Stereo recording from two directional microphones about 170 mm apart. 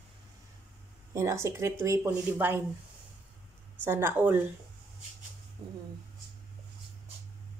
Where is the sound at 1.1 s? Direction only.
15° right (ahead or behind).